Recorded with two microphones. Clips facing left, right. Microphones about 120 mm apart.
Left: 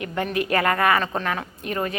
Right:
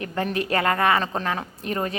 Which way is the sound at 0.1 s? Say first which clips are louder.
Left 1 dB; 30° right (ahead or behind).